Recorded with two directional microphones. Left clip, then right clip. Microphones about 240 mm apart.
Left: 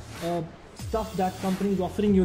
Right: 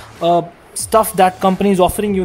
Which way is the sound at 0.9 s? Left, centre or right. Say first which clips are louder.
Right 16 dB; right.